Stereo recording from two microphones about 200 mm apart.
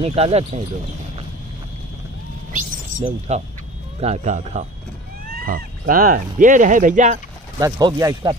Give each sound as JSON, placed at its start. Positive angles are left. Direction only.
{"t": 0.0, "sound": "speech", "side_deg": -30}
{"t": 3.3, "sound": "speech", "side_deg": -35}
{"t": 7.5, "sound": "speech", "side_deg": -20}